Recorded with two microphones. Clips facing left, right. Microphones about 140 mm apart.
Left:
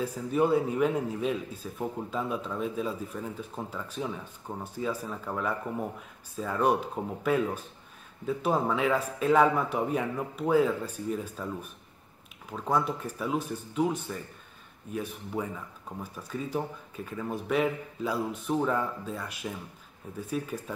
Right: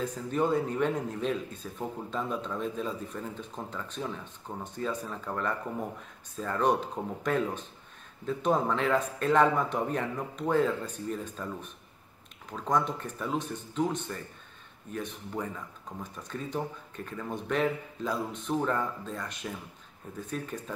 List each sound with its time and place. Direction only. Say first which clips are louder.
0.0 s speech: left 2 dB; 5° left (ahead or behind)